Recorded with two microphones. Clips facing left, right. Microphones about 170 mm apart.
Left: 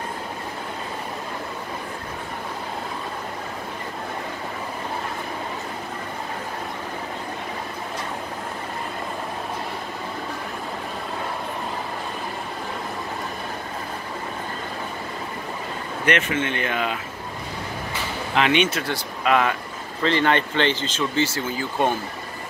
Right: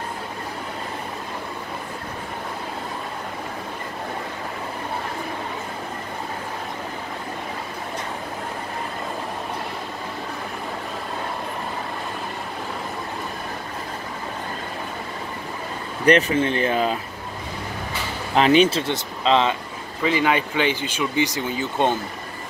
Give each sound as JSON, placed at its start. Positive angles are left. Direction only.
{"t": 16.1, "sound": "speech", "side_deg": -35}
{"t": 18.3, "sound": "speech", "side_deg": -35}
{"t": 20.0, "sound": "speech", "side_deg": -10}